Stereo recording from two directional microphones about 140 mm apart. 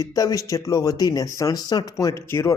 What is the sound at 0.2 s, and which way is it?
Speech, 25° left (ahead or behind).